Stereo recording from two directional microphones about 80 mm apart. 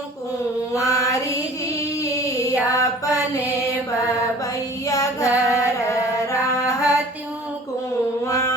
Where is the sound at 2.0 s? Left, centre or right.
Left.